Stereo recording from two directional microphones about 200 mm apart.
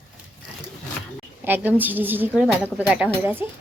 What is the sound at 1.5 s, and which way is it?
A woman's voice, 10° right (ahead or behind).